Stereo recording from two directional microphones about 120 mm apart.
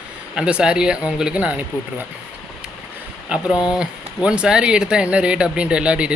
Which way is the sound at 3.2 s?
10° right (ahead or behind).